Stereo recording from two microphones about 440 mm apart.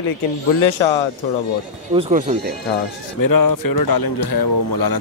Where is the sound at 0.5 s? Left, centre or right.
Left.